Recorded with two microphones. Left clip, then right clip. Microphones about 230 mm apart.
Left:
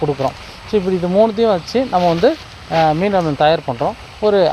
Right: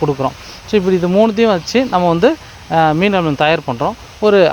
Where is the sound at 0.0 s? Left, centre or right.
Right.